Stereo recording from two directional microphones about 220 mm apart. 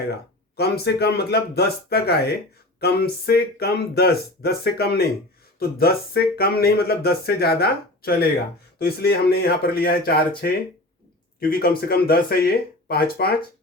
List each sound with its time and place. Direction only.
0.1 s speech: 45° left (ahead or behind)